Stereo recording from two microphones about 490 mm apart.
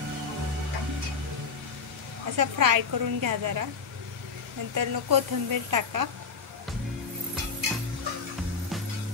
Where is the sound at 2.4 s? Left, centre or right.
Right.